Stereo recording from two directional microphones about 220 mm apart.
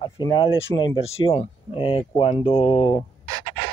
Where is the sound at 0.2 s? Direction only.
20° left (ahead or behind).